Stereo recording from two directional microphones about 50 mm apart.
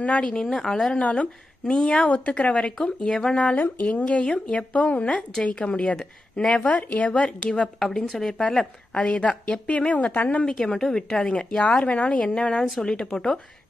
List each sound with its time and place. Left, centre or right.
0.0 s speech: left
0.9 s a woman's voice: left
1.8 s speech: centre
2.0 s a woman's voice: left
3.5 s speech: left
3.9 s a woman's voice: left
8.1 s a woman's voice: centre; by 10.1 s left
10.4 s a woman's voice: centre